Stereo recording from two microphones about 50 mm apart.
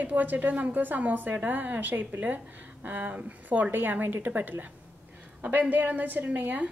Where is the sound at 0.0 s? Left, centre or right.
Right.